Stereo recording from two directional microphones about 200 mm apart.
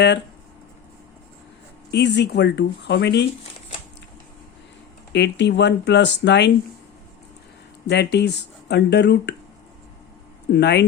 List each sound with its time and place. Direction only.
1.9 s speech: 55° left (ahead or behind)
5.1 s speech: 60° left (ahead or behind)
7.9 s speech: 55° left (ahead or behind)
10.5 s speech: 60° left (ahead or behind)